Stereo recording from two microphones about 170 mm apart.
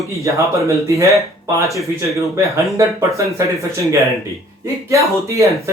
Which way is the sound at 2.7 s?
20° right (ahead or behind).